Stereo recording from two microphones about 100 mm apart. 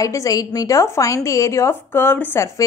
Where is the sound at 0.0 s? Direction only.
35° left (ahead or behind).